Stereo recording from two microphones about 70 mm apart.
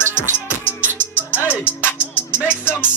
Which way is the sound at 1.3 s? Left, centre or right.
Left.